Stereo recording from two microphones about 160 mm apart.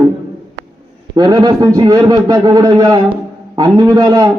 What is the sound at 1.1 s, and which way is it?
A man's voice, 25° right (ahead or behind).